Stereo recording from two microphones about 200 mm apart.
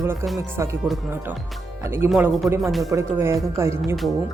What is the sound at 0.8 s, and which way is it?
Speech, centre (ahead or behind).